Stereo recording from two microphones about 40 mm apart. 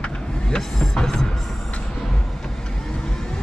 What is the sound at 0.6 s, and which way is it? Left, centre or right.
Vehicle, centre.